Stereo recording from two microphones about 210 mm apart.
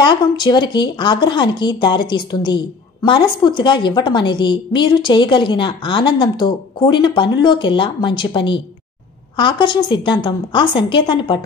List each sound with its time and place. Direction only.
0.0 s speech: 20° left (ahead or behind)